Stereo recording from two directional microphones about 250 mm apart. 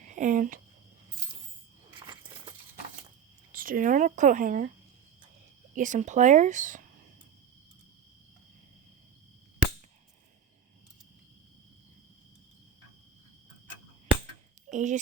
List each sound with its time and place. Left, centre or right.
0.0 s speech: right
2.0 s a sound: centre
3.5 s speech: right
5.7 s speech: right
14.7 s speech: right